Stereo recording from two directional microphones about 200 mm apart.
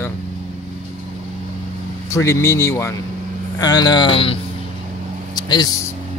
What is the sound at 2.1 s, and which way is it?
Speech, 15° left (ahead or behind).